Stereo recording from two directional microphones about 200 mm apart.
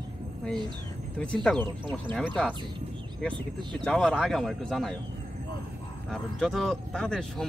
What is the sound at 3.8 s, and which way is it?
Speech, 5° left (ahead or behind).